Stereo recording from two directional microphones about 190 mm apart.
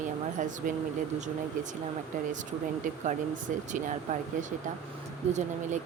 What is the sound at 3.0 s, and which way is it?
Speech, 40° right (ahead or behind).